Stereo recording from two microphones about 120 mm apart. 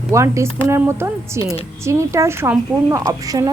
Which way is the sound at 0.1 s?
25° right (ahead or behind).